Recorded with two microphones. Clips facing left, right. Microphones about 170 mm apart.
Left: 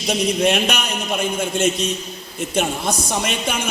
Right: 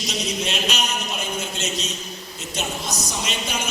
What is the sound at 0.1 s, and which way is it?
A man's voice, 55° left (ahead or behind).